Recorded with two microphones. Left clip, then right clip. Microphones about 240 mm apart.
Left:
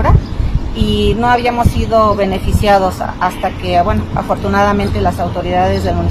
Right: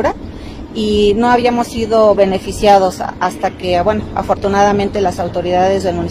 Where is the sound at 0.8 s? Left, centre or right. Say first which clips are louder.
Right 3 dB; right.